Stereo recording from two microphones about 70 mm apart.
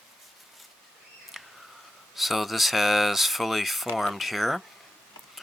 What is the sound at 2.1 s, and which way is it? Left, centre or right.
Speech, centre.